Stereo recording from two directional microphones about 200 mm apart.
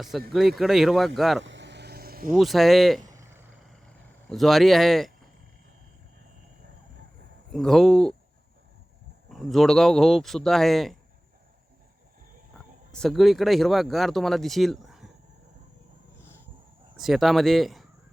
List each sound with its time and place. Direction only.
0.3 s speech: centre (ahead or behind)
1.5 s vehicle: 60° right (ahead or behind)
2.3 s speech: centre (ahead or behind)
3.0 s a sound: 15° right (ahead or behind)
3.7 s a sound: centre (ahead or behind)
7.5 s speech: centre (ahead or behind)
9.3 s speech: centre (ahead or behind)
12.9 s speech: centre (ahead or behind)
17.0 s speech: centre (ahead or behind)